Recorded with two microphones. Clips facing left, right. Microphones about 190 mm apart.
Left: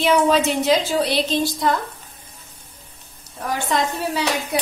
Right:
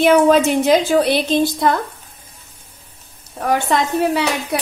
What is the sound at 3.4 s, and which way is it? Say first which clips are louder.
Speech: right 5 dB; 60° right (ahead or behind).